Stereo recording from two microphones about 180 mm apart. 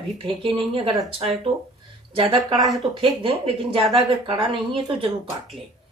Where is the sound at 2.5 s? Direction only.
Centre (ahead or behind).